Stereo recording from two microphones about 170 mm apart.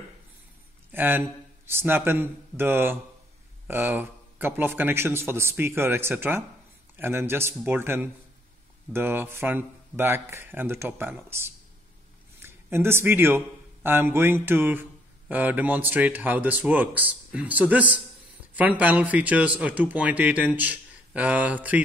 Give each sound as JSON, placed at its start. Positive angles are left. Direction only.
{"t": 0.9, "sound": "speech", "side_deg": -10}